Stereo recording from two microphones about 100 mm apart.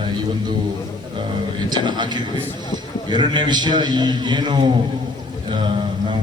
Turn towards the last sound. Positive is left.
turn(degrees=-60)  # may be behind; listen again after turning